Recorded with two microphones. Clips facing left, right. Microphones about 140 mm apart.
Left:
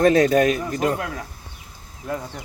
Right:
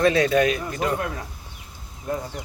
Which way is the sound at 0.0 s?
45° left (ahead or behind).